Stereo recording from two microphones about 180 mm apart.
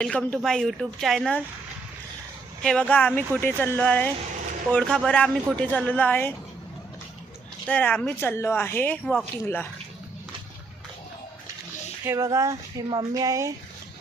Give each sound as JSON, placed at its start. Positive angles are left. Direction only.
{"t": 0.0, "sound": "a woman's voice", "side_deg": 5}
{"t": 2.6, "sound": "a woman's voice", "side_deg": 5}
{"t": 7.7, "sound": "speech", "side_deg": 10}
{"t": 12.0, "sound": "speech", "side_deg": -15}